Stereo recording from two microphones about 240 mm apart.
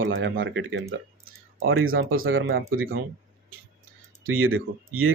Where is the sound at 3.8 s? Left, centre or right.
Right.